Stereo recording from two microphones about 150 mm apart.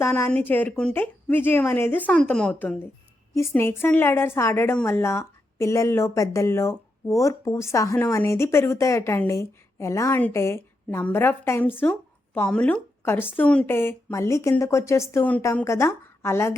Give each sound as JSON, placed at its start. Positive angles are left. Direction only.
{"t": 0.0, "sound": "a woman's voice", "side_deg": 15}